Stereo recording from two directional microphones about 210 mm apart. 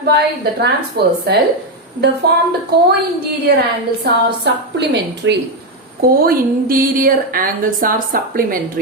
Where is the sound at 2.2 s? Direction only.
50° right (ahead or behind).